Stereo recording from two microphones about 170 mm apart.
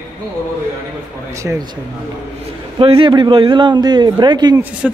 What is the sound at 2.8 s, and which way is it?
A man's voice, 30° right (ahead or behind).